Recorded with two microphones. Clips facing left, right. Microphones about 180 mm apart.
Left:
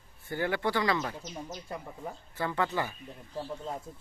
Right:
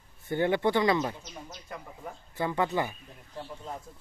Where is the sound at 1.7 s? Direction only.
30° left (ahead or behind).